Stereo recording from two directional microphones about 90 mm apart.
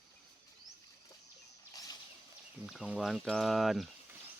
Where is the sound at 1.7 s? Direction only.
45° left (ahead or behind).